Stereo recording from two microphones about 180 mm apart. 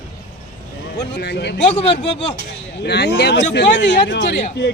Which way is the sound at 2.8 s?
65° left (ahead or behind).